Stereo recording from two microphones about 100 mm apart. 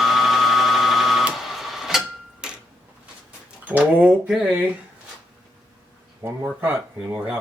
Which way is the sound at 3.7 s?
15° right (ahead or behind).